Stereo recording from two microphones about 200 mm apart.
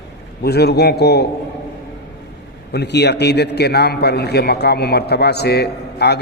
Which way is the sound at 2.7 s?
55° left (ahead or behind).